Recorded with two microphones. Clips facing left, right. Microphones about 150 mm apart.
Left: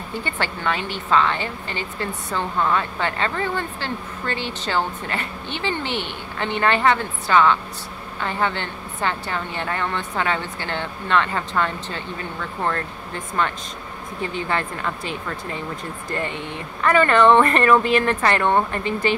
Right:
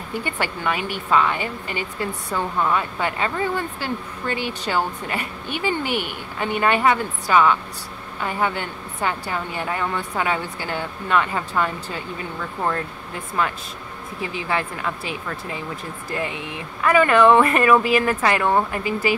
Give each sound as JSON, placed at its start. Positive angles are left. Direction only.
{"t": 0.2, "sound": "speech", "side_deg": -10}